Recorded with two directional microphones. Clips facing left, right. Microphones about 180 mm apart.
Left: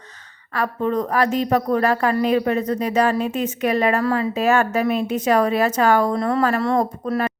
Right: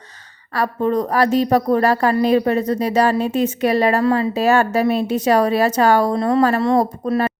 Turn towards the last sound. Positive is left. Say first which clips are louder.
# right 3 dB
turn(degrees=-30)  # may be behind; listen again after turning